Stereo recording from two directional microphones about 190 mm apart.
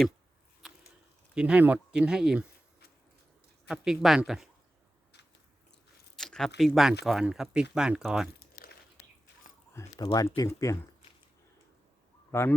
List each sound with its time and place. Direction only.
1.4 s speech: 5° right (ahead or behind)
3.7 s speech: centre (ahead or behind)
6.1 s squish: centre (ahead or behind)
6.6 s speech: centre (ahead or behind)
9.7 s speech: 15° left (ahead or behind)
12.3 s speech: 15° left (ahead or behind)